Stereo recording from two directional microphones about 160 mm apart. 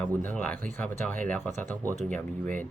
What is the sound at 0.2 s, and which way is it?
Speech, 10° left (ahead or behind).